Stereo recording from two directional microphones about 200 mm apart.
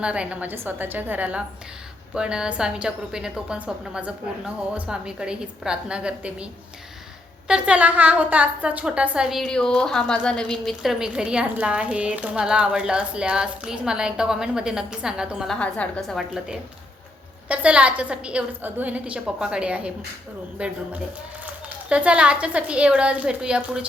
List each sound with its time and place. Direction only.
0.0 s a woman's voice: 5° right (ahead or behind)
21.8 s a woman's voice: 5° right (ahead or behind)